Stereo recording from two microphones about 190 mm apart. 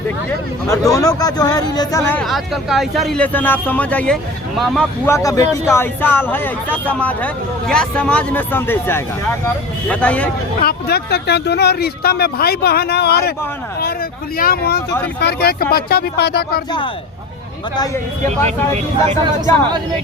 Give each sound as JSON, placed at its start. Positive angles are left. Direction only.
{"t": 0.7, "sound": "speech", "side_deg": 15}
{"t": 5.0, "sound": "speech", "side_deg": 15}
{"t": 10.6, "sound": "speech", "side_deg": 55}
{"t": 14.3, "sound": "speech", "side_deg": 50}
{"t": 18.7, "sound": "speech", "side_deg": -35}
{"t": 19.5, "sound": "speech", "side_deg": 20}